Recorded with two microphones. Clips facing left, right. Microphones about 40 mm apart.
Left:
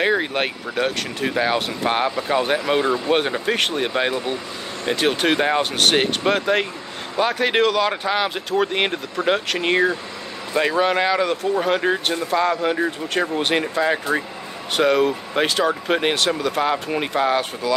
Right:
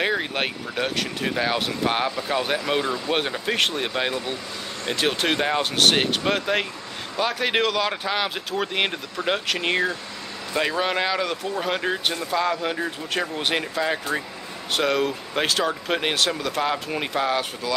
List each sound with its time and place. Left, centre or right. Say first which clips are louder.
0.0 s speech: left 4 dB; centre